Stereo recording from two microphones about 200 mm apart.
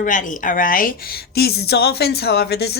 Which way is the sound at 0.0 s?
40° left (ahead or behind).